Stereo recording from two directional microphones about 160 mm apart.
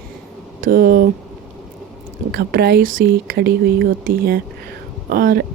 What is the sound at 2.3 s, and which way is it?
Speech, 75° right (ahead or behind).